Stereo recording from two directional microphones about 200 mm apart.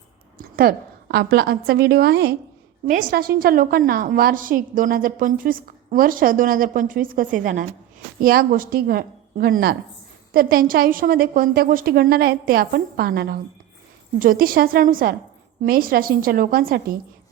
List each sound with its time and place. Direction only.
0.3 s a woman's voice: 45° right (ahead or behind)
2.8 s a woman's voice: 45° right (ahead or behind)